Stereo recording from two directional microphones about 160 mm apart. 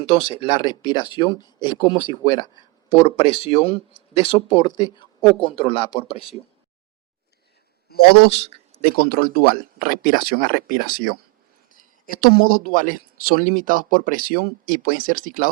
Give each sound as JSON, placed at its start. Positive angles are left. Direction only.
{"t": 0.0, "sound": "speech", "side_deg": 35}
{"t": 7.9, "sound": "a man's voice", "side_deg": 75}
{"t": 8.3, "sound": "speech", "side_deg": 40}
{"t": 8.8, "sound": "speech", "side_deg": 65}
{"t": 10.4, "sound": "speech", "side_deg": -60}
{"t": 10.8, "sound": "speech", "side_deg": 65}
{"t": 13.4, "sound": "speech", "side_deg": -55}
{"t": 14.2, "sound": "speech", "side_deg": 65}